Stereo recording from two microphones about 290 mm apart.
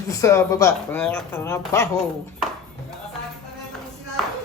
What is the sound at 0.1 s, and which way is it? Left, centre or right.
Speech, centre.